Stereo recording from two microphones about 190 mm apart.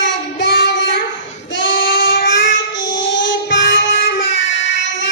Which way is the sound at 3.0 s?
75° left (ahead or behind).